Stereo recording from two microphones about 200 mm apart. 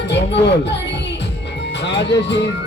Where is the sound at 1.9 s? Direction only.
60° left (ahead or behind).